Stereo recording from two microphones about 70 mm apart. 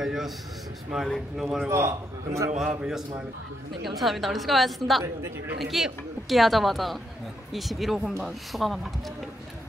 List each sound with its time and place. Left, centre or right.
0.0 s a sound: centre
0.9 s a woman's voice: centre
1.7 s a man's voice: right
2.6 s a man's voice: centre